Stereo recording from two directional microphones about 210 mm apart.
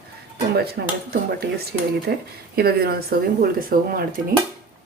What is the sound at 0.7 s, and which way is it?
Speech, 45° right (ahead or behind).